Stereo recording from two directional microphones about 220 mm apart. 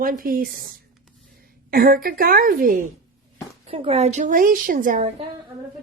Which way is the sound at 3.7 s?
30° right (ahead or behind).